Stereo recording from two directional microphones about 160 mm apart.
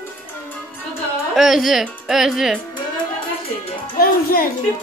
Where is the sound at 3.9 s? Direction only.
65° left (ahead or behind).